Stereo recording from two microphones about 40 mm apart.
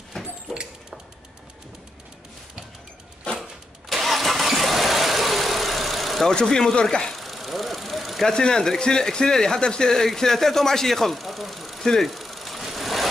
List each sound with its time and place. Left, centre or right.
0.2 s a sound: centre
3.9 s vehicle: centre
6.2 s speech: centre
7.2 s vehicle: centre
8.3 s speech: centre
11.8 s speech: centre
12.1 s a sound: centre
12.7 s vehicle: centre